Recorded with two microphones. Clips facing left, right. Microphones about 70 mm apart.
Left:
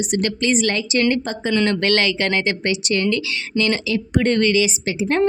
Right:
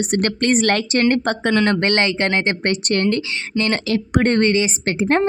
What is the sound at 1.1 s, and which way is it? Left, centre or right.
Speech, right.